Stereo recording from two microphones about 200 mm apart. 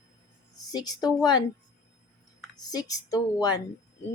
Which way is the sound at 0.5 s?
20° left (ahead or behind).